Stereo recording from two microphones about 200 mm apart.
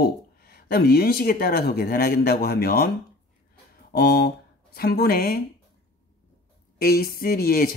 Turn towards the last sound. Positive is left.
turn(degrees=50)  # may be behind; listen again after turning